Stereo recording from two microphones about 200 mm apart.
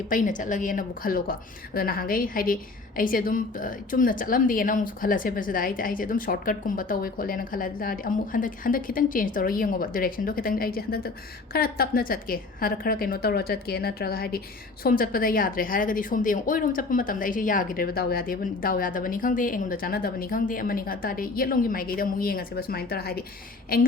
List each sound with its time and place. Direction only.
0.1 s a woman's voice: 40° left (ahead or behind)